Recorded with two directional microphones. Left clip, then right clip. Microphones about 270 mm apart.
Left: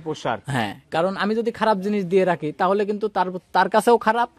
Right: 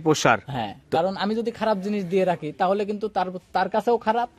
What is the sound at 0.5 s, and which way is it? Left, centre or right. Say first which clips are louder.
A man's voice: left 2 dB; left.